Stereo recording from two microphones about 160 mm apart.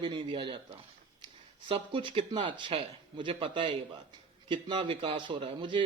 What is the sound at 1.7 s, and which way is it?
Speech, 35° right (ahead or behind).